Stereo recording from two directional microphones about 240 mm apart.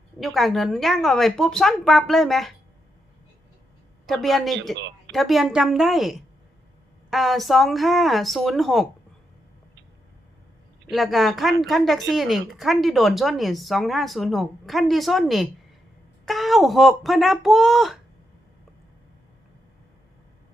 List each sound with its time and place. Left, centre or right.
0.2 s a woman's voice: centre
4.0 s a woman's voice: centre
4.7 s speech: right
5.1 s a woman's voice: centre
10.8 s a woman's voice: centre